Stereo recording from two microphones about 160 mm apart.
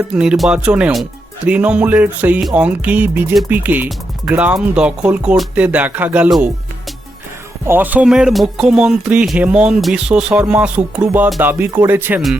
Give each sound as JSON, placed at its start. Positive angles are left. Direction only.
{"t": 0.1, "sound": "speech", "side_deg": -5}
{"t": 7.7, "sound": "speech", "side_deg": -10}